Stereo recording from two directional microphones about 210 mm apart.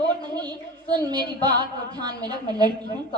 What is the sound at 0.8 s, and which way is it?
Speech, 20° right (ahead or behind).